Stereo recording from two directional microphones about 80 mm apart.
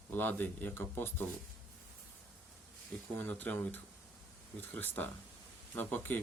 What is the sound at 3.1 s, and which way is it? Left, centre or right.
Speech, left.